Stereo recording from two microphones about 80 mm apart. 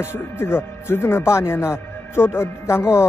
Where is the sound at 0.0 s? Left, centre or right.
Left.